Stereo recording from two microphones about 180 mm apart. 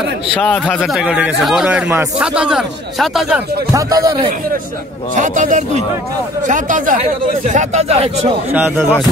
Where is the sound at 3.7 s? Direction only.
20° right (ahead or behind).